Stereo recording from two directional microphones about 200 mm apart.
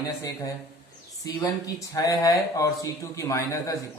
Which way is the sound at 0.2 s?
15° left (ahead or behind).